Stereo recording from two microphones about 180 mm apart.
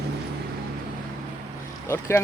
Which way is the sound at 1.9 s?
15° left (ahead or behind).